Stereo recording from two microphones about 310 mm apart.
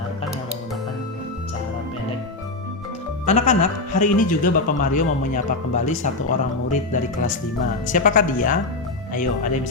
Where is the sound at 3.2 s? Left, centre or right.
Left.